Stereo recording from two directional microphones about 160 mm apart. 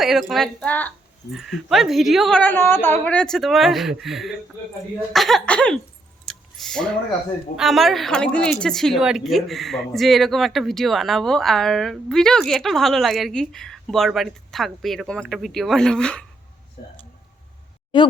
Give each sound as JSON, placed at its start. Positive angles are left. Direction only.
{"t": 0.0, "sound": "speech", "side_deg": 0}
{"t": 1.3, "sound": "speech", "side_deg": 0}
{"t": 6.2, "sound": "a sound", "side_deg": 0}
{"t": 7.5, "sound": "speech", "side_deg": 0}
{"t": 16.8, "sound": "speech", "side_deg": 60}